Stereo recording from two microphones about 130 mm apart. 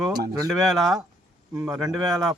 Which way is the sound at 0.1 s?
25° right (ahead or behind).